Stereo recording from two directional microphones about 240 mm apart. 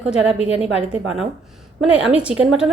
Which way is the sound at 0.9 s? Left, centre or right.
Centre.